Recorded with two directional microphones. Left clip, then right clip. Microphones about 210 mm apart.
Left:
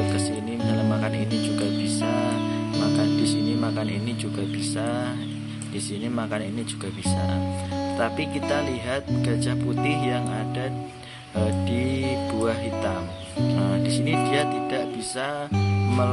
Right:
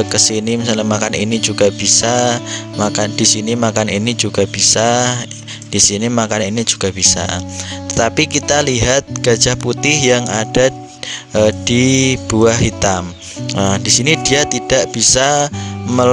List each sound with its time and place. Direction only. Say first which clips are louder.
0.1 s speech: right 13 dB; 50° right (ahead or behind)